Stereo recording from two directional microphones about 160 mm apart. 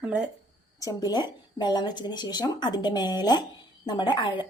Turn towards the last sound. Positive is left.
turn(degrees=30)  # may be behind; listen again after turning